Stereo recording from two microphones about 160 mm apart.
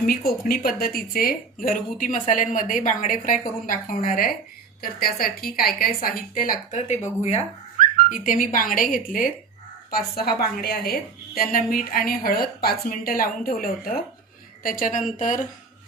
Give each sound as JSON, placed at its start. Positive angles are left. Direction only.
{"t": 0.0, "sound": "a woman's voice", "side_deg": 65}
{"t": 8.1, "sound": "a woman's voice", "side_deg": 55}
{"t": 9.9, "sound": "a woman's voice", "side_deg": 75}